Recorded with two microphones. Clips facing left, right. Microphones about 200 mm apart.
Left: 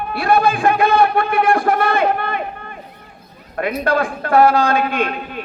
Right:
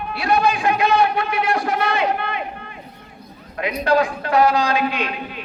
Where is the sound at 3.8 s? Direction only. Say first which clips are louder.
Right 3 dB; 55° left (ahead or behind).